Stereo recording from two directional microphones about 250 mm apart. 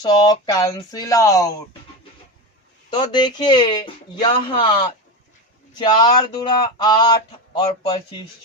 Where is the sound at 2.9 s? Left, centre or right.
Centre.